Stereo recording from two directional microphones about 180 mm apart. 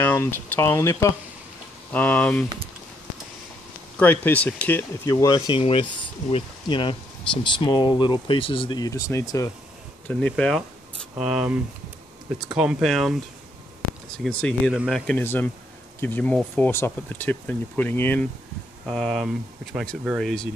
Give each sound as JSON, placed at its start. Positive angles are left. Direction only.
{"t": 0.0, "sound": "speech", "side_deg": 10}
{"t": 4.0, "sound": "speech", "side_deg": 10}
{"t": 5.6, "sound": "speech", "side_deg": 30}
{"t": 10.0, "sound": "speech", "side_deg": 5}
{"t": 14.1, "sound": "speech", "side_deg": 0}